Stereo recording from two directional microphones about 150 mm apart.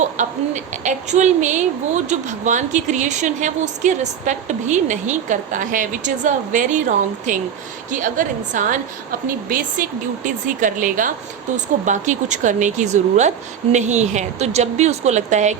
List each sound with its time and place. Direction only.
0.0 s a woman's voice: 55° right (ahead or behind)